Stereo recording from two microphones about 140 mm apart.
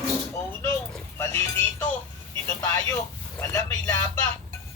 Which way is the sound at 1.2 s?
15° left (ahead or behind).